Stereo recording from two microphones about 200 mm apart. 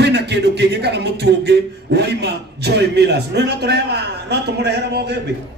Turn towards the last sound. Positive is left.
turn(degrees=-55)  # may be behind; listen again after turning